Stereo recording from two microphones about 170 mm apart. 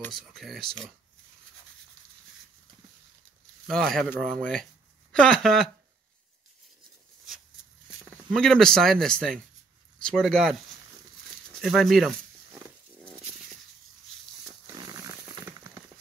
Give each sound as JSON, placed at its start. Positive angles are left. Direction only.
{"t": 0.1, "sound": "speech", "side_deg": 0}
{"t": 3.6, "sound": "speech", "side_deg": 0}
{"t": 8.3, "sound": "speech", "side_deg": 5}
{"t": 11.6, "sound": "speech", "side_deg": 0}
{"t": 14.8, "sound": "a sound", "side_deg": -20}